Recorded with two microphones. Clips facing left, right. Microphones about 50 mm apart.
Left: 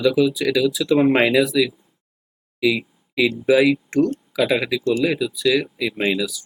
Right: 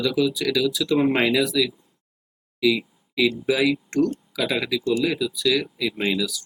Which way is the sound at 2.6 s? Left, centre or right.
Centre.